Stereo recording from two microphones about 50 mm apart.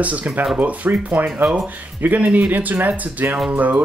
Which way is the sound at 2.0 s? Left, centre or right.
Right.